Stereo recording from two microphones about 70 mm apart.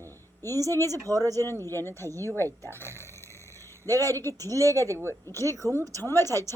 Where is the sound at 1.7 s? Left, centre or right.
Left.